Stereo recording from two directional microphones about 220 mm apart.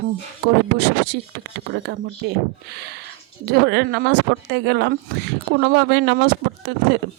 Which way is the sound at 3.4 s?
50° right (ahead or behind).